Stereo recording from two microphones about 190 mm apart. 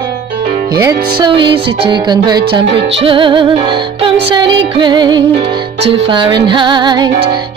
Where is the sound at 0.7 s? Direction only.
20° right (ahead or behind).